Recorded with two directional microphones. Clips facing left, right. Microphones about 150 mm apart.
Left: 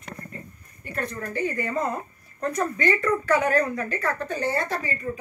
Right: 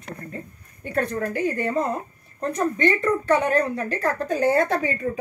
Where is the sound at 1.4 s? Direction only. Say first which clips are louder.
Right 1 dB; 30° right (ahead or behind); by 4.7 s 50° right (ahead or behind).